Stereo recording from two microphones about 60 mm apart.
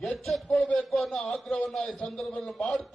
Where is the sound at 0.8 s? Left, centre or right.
Centre.